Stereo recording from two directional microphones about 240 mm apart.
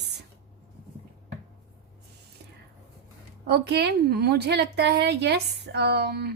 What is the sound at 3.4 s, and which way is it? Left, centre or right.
A woman's voice, right.